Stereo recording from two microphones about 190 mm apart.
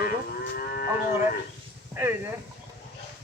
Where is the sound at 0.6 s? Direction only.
50° left (ahead or behind).